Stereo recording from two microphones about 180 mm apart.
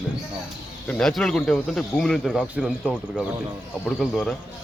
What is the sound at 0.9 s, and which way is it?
Speech, 5° left (ahead or behind).